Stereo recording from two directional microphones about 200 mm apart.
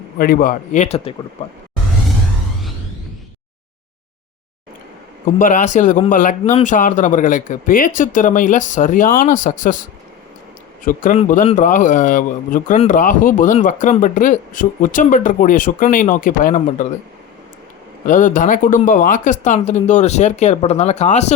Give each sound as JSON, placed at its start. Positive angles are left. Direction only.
{"t": 0.2, "sound": "speech", "side_deg": 45}
{"t": 5.4, "sound": "speech", "side_deg": 40}
{"t": 10.8, "sound": "a man's voice", "side_deg": 45}
{"t": 18.0, "sound": "speech", "side_deg": 40}